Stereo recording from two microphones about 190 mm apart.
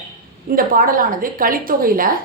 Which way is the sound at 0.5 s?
50° right (ahead or behind).